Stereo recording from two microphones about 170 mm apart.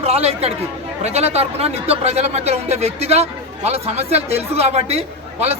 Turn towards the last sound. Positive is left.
turn(degrees=-40)  # may be behind; listen again after turning